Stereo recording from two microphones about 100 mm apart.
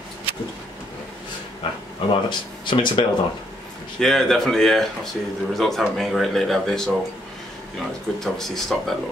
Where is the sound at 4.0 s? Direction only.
5° left (ahead or behind).